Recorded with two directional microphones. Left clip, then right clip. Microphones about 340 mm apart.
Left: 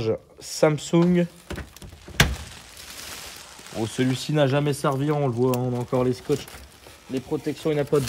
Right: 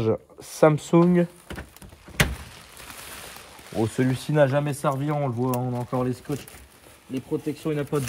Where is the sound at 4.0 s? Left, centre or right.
Centre.